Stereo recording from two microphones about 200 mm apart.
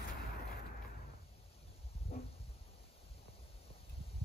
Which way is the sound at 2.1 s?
30° left (ahead or behind).